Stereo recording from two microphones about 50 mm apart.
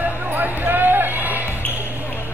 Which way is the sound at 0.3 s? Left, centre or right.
Right.